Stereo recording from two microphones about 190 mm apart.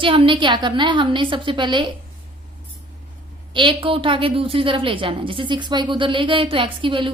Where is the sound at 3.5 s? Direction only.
25° right (ahead or behind).